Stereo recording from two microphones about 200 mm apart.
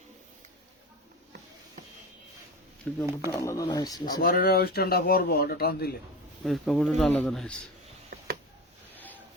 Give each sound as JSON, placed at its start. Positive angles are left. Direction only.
{"t": 2.8, "sound": "a man's voice", "side_deg": 5}
{"t": 4.2, "sound": "speech", "side_deg": 50}
{"t": 6.4, "sound": "a man's voice", "side_deg": 0}
{"t": 8.9, "sound": "a sound", "side_deg": 10}